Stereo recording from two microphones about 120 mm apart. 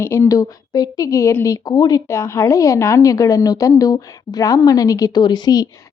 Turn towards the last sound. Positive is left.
turn(degrees=35)  # may be behind; listen again after turning